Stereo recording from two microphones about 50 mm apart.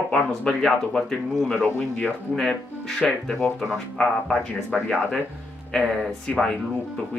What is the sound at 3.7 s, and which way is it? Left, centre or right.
Speech, centre.